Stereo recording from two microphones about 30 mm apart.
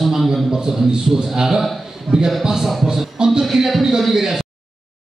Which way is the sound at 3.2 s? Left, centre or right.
Right.